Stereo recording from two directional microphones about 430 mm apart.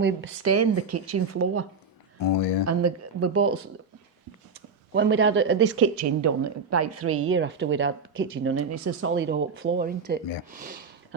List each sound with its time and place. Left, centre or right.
0.0 s speech: right
2.2 s speech: left
2.6 s speech: right
4.9 s speech: right